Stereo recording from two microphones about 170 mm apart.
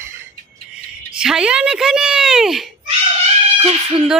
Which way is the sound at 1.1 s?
5° right (ahead or behind).